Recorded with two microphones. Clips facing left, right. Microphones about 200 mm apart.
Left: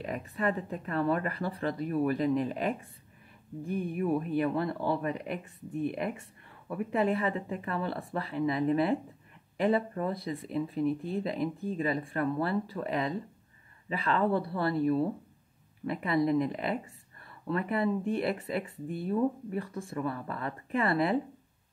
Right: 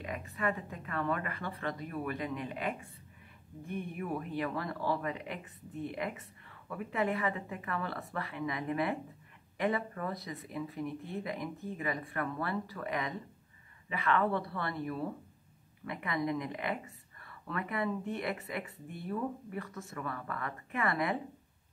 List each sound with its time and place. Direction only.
0.0 s speech: 35° left (ahead or behind)